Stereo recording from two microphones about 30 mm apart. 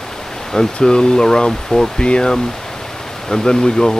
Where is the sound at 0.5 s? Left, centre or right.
Left.